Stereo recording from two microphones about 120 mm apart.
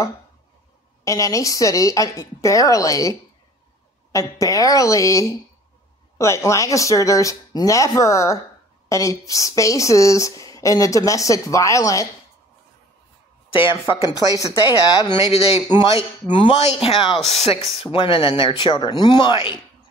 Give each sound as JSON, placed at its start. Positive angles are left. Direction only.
{"t": 1.0, "sound": "a woman's voice", "side_deg": 25}
{"t": 13.5, "sound": "speech", "side_deg": 45}
{"t": 14.1, "sound": "speech", "side_deg": 30}
{"t": 15.3, "sound": "speech", "side_deg": 55}
{"t": 15.7, "sound": "speech", "side_deg": 40}
{"t": 17.9, "sound": "speech", "side_deg": 45}